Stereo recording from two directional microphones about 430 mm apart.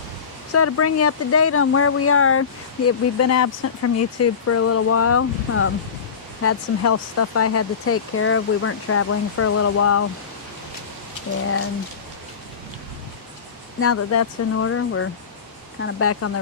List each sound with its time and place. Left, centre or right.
0.5 s speech: left
13.7 s speech: left